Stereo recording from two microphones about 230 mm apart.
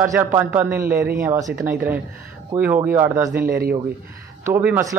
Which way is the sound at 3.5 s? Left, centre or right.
Right.